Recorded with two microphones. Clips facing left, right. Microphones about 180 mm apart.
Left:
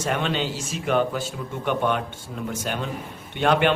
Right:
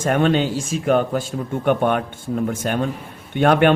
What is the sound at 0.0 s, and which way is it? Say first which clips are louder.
A man's voice: right 7 dB; 50° right (ahead or behind).